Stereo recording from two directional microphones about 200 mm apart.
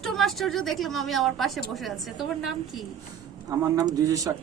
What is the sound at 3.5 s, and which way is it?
Speech, 20° right (ahead or behind).